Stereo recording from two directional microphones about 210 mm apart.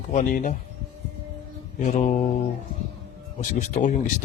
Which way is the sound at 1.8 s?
35° left (ahead or behind).